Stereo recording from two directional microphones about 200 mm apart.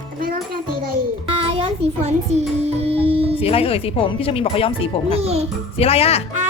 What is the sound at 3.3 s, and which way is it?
A woman's voice, 30° left (ahead or behind).